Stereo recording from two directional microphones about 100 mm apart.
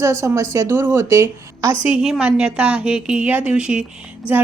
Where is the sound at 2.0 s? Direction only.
10° right (ahead or behind).